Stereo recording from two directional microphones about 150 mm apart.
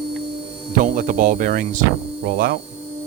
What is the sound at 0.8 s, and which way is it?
Hum, 60° right (ahead or behind).